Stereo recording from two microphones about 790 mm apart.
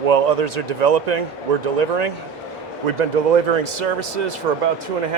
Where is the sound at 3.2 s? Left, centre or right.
Right.